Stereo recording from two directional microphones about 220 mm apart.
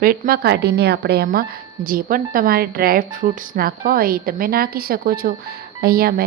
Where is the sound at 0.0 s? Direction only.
40° right (ahead or behind).